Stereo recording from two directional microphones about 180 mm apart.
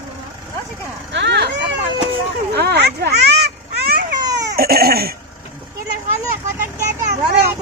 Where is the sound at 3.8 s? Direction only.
60° right (ahead or behind).